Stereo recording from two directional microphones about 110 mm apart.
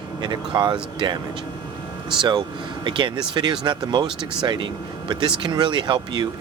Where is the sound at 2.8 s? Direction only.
45° right (ahead or behind).